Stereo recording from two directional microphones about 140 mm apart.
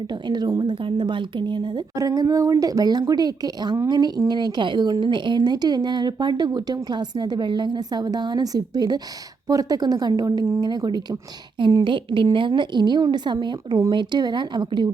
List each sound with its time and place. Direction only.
0.1 s a woman's voice: 30° right (ahead or behind)